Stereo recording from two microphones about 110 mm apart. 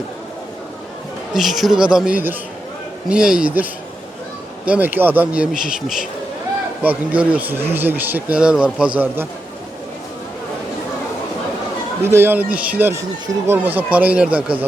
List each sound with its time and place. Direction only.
1.3 s a man's voice: centre (ahead or behind)
6.8 s a man's voice: 15° right (ahead or behind)
12.0 s a man's voice: 20° right (ahead or behind)